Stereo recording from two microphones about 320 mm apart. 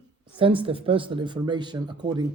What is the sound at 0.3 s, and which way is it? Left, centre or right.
Speech, centre.